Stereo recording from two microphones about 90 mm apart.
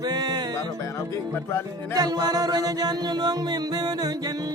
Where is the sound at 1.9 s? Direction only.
45° right (ahead or behind).